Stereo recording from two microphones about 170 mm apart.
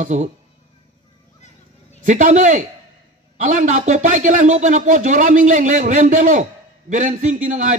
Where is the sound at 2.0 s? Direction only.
45° right (ahead or behind).